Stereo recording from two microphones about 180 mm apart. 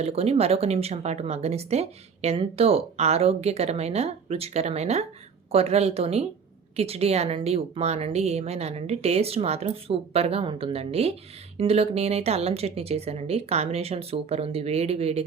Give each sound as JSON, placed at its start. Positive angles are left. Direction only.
{"t": 0.0, "sound": "speech", "side_deg": -35}